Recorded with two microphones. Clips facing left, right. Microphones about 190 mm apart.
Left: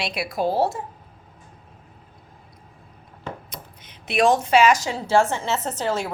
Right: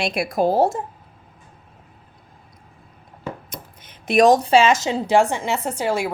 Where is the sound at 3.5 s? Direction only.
50° right (ahead or behind); by 6.1 s 10° right (ahead or behind).